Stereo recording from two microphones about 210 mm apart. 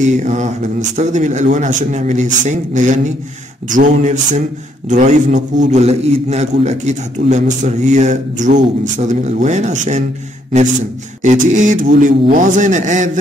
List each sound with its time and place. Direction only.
0.0 s a man's voice: 35° right (ahead or behind)
11.2 s a man's voice: 35° right (ahead or behind)